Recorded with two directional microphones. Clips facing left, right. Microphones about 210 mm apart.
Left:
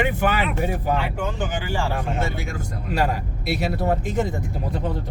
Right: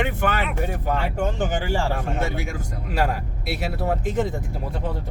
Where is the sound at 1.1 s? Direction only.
45° right (ahead or behind).